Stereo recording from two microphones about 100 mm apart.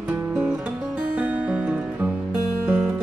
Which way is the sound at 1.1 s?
15° right (ahead or behind).